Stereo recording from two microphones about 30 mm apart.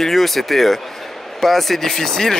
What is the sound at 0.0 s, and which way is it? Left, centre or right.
Speech, centre.